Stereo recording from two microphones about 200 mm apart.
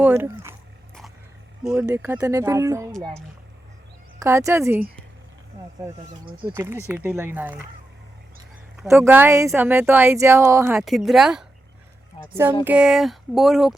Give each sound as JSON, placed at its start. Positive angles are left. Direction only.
{"t": 0.0, "sound": "a woman's voice", "side_deg": -10}
{"t": 1.6, "sound": "a woman's voice", "side_deg": -5}
{"t": 4.2, "sound": "a woman's voice", "side_deg": -15}
{"t": 6.5, "sound": "a woman's voice", "side_deg": -15}
{"t": 8.9, "sound": "a woman's voice", "side_deg": -10}
{"t": 10.8, "sound": "a woman's voice", "side_deg": 0}